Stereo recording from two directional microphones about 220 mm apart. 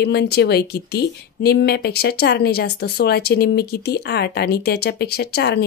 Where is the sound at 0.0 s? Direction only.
50° left (ahead or behind).